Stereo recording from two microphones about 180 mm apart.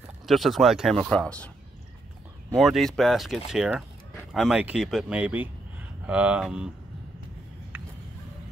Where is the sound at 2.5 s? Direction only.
Centre (ahead or behind).